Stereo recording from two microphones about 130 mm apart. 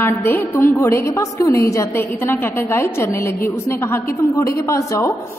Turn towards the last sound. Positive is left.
turn(degrees=25)  # may be behind; listen again after turning